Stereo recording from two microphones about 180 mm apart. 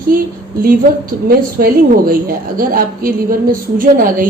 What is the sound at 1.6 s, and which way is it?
A woman's voice, 50° right (ahead or behind).